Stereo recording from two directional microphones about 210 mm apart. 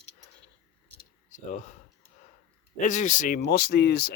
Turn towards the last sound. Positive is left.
turn(degrees=50)  # may be behind; listen again after turning